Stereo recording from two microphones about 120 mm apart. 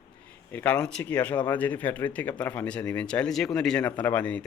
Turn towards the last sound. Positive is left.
turn(degrees=10)  # may be behind; listen again after turning